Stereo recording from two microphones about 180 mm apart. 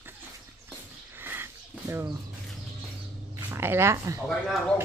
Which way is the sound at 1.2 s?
10° right (ahead or behind).